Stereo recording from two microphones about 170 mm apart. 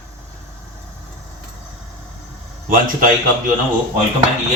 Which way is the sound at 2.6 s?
55° right (ahead or behind).